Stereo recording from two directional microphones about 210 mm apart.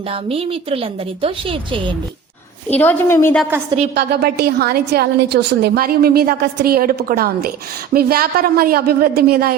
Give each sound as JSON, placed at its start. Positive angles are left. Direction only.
{"t": 0.1, "sound": "a woman's voice", "side_deg": -25}
{"t": 2.7, "sound": "a woman's voice", "side_deg": 10}
{"t": 3.9, "sound": "a woman's voice", "side_deg": -50}